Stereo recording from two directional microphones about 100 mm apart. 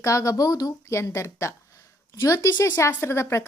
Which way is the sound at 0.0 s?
35° left (ahead or behind).